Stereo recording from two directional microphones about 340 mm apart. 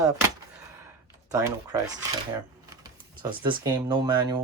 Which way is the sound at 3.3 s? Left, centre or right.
Centre.